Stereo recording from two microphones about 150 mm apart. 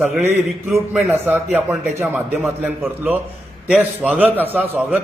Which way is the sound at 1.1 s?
15° right (ahead or behind).